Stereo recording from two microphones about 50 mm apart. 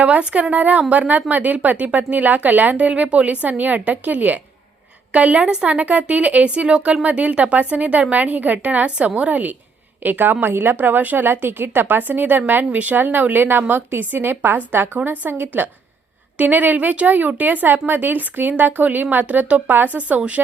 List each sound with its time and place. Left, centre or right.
0.0 s a woman's voice: right
15.3 s speech: right